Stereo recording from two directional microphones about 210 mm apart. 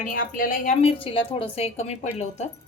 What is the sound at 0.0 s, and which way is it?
A woman's voice, 40° left (ahead or behind).